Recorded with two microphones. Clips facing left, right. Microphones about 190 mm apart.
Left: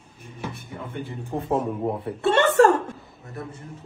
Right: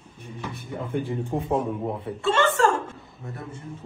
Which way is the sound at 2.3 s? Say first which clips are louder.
Left 4 dB; 65° left (ahead or behind).